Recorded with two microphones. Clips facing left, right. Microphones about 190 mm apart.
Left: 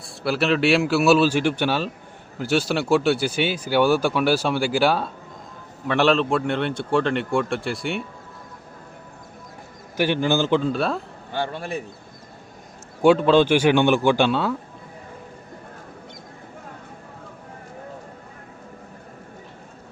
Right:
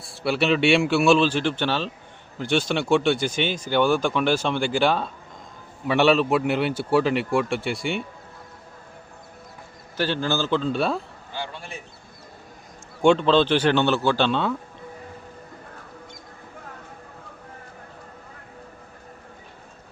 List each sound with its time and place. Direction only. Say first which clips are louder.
0.0 s speech: even; centre (ahead or behind)
10.0 s speech: left 4 dB; 15° left (ahead or behind)
10.7 s speech: even; centre (ahead or behind)
11.3 s speech: left 9 dB; 60° left (ahead or behind)
13.0 s speech: left 2 dB; 5° left (ahead or behind)